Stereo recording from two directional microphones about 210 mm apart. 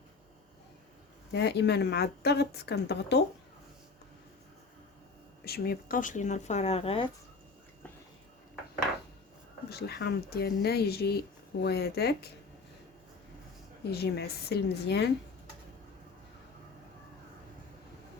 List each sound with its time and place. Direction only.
1.3 s speech: 55° left (ahead or behind)
5.5 s speech: 45° left (ahead or behind); by 7.1 s 25° left (ahead or behind)
9.6 s speech: 50° left (ahead or behind)
13.8 s speech: 50° left (ahead or behind)